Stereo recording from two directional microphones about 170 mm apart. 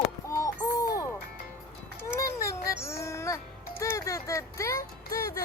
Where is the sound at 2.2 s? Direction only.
20° left (ahead or behind).